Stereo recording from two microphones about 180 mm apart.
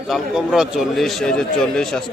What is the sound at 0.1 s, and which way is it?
Speech, 5° right (ahead or behind).